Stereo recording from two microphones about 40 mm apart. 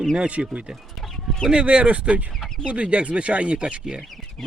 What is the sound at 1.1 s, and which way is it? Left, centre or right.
Chicken, centre.